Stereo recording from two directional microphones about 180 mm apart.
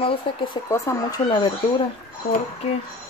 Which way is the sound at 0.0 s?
30° left (ahead or behind).